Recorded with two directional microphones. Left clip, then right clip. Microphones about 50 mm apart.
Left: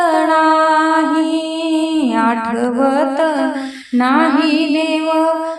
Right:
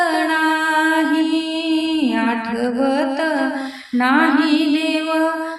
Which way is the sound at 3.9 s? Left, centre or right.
Left.